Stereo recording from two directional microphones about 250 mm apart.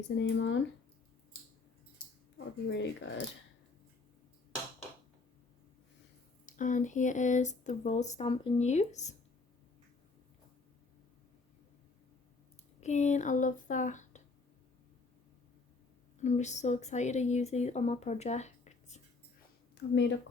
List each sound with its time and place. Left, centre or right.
0.2 s speech: left
2.6 s speech: left
6.4 s speech: left
12.8 s speech: left
16.1 s speech: left
19.7 s speech: left